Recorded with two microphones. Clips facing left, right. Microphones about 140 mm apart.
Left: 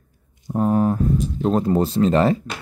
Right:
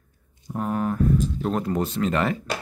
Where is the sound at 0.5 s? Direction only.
30° left (ahead or behind).